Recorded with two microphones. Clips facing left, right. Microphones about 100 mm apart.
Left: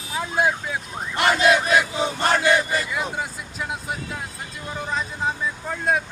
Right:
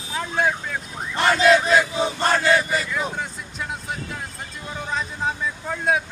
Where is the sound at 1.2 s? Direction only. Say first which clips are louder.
Right 2 dB; 15° left (ahead or behind).